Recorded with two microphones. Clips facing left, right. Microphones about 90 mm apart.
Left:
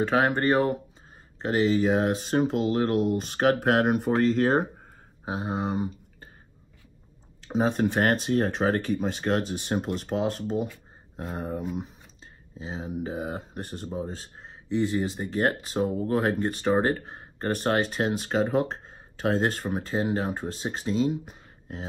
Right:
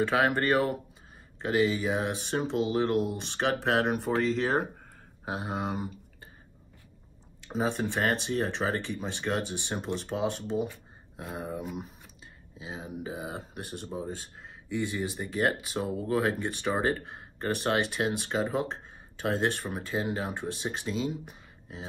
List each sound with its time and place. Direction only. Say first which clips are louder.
0.0 s speech: left 2 dB; 35° left (ahead or behind)
0.3 s speech: left 3 dB; 20° left (ahead or behind)
1.4 s speech: left 3 dB; 40° left (ahead or behind)
5.2 s speech: left 3 dB; 25° left (ahead or behind)
7.5 s speech: left 5 dB; 50° left (ahead or behind)